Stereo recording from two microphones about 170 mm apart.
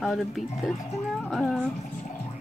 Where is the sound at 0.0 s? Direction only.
Centre (ahead or behind).